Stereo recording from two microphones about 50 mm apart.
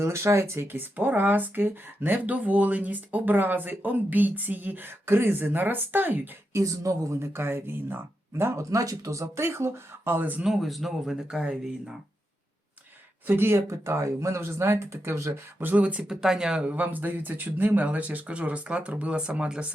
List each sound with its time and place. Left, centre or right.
0.0 s speech: right
0.9 s speech: right
5.0 s speech: right
6.5 s speech: right
7.3 s speech: right
9.2 s speech: right
10.4 s speech: centre
13.2 s speech: right
13.7 s speech: right
15.7 s speech: right
16.0 s speech: centre
16.6 s speech: right; by 19.6 s centre